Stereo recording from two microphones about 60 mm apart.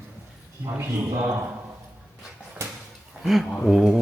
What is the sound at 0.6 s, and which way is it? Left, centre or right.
Speech, right.